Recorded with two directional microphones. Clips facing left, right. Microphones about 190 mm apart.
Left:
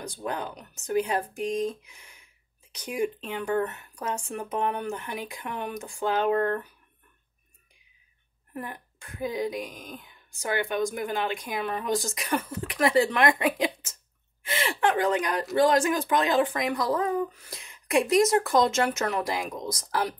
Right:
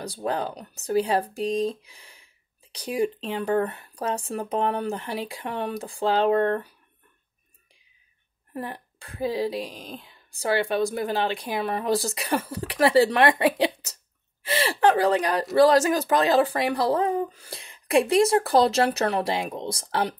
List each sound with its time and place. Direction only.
0.0 s speech: 35° right (ahead or behind)
8.5 s speech: 30° right (ahead or behind)